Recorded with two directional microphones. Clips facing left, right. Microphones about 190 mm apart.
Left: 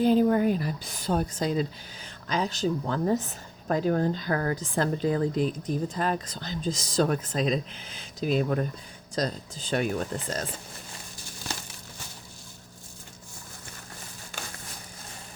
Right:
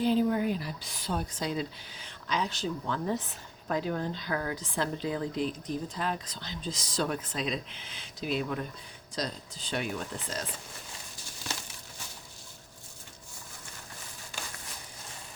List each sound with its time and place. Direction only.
0.0 s speech: 45° left (ahead or behind)